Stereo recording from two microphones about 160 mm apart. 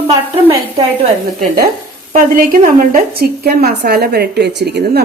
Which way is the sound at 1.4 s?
70° right (ahead or behind).